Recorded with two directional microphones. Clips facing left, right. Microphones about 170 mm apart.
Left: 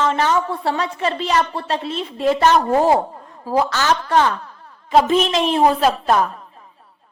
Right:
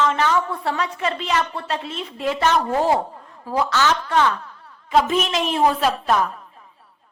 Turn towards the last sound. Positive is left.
turn(degrees=40)  # may be behind; listen again after turning